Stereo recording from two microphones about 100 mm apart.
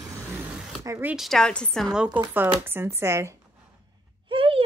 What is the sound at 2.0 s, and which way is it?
Speech, 10° right (ahead or behind).